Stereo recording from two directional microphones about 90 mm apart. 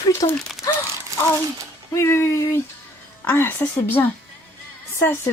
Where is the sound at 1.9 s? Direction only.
30° left (ahead or behind).